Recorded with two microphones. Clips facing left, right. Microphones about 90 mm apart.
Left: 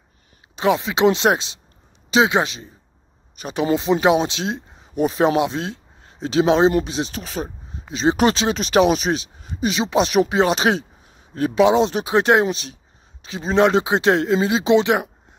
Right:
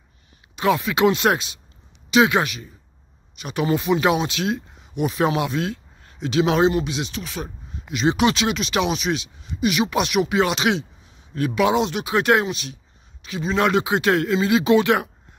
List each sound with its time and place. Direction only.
0.6 s a man's voice: 25° left (ahead or behind); by 9.7 s 40° left (ahead or behind)
9.7 s speech: 30° left (ahead or behind)
11.3 s a man's voice: 30° left (ahead or behind)